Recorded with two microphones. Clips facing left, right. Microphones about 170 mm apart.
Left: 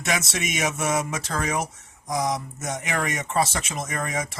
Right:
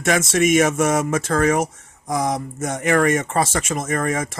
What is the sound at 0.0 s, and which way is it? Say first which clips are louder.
Speech: right 9 dB; 50° right (ahead or behind).